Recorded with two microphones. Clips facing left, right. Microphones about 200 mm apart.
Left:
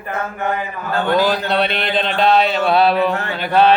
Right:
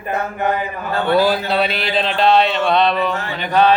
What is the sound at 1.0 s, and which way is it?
Speech, 5° right (ahead or behind).